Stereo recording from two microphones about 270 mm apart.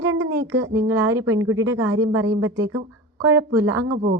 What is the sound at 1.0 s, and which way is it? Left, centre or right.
A woman's voice, right.